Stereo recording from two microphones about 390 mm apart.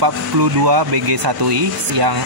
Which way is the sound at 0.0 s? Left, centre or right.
Right.